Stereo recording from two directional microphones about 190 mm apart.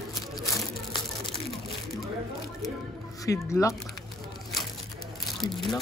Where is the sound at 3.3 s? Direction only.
15° left (ahead or behind).